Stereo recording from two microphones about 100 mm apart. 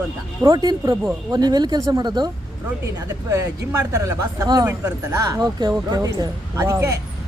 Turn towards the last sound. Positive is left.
turn(degrees=-30)  # may be behind; listen again after turning